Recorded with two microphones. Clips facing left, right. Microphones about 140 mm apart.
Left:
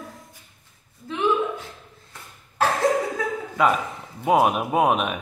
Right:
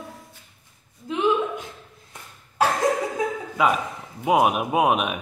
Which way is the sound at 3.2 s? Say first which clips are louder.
Right 2 dB; 20° right (ahead or behind).